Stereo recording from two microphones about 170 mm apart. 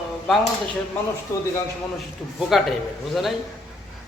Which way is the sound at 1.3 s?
20° left (ahead or behind).